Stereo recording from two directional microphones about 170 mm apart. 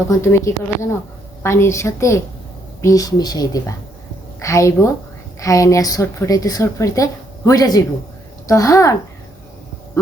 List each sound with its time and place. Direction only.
0.1 s a woman's voice: 15° left (ahead or behind)